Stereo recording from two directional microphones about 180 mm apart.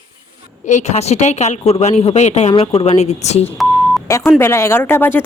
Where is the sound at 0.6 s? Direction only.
40° left (ahead or behind).